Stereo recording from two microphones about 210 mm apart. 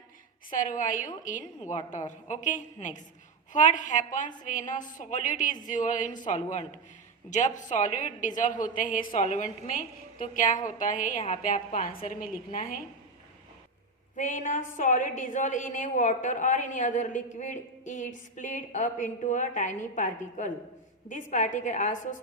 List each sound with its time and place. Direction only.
0.5 s a woman's voice: 40° left (ahead or behind)
14.2 s a woman's voice: 35° left (ahead or behind)